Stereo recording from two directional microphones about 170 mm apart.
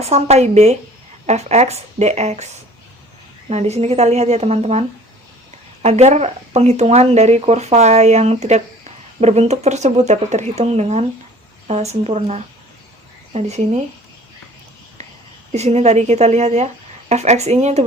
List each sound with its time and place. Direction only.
0.0 s speech: 40° right (ahead or behind)
3.5 s speech: 40° right (ahead or behind)
15.5 s speech: 40° right (ahead or behind)